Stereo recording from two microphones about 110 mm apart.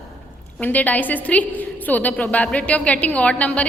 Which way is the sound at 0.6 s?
15° left (ahead or behind).